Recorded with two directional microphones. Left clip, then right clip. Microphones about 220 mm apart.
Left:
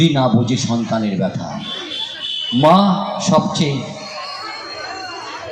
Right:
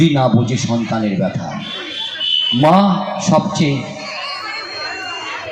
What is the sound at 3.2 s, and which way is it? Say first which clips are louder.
Speech: right 1 dB; 30° right (ahead or behind).